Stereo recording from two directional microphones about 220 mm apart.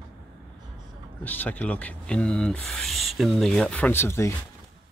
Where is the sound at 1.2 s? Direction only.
10° left (ahead or behind).